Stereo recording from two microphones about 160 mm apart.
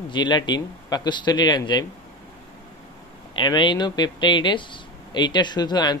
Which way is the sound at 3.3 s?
30° left (ahead or behind).